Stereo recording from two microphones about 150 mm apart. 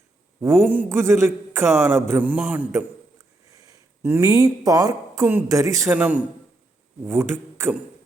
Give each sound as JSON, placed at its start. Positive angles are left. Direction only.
{"t": 0.3, "sound": "a man's voice", "side_deg": -15}